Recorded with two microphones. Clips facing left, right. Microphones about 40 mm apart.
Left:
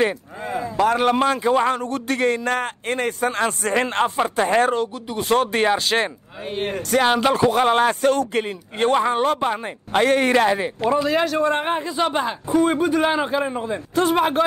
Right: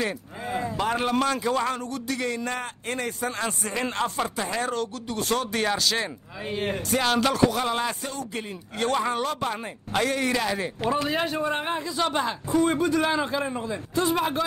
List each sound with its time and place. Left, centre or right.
0.7 s a man's voice: left
1.1 s a man's voice: left
5.3 s speech: left
6.5 s a man's voice: left
7.0 s a man's voice: left
7.6 s a man's voice: left
8.7 s speech: left
10.0 s speech: left
10.5 s a man's voice: left
11.1 s speech: left
11.6 s speech: left
12.0 s a man's voice: left
13.9 s a man's voice: left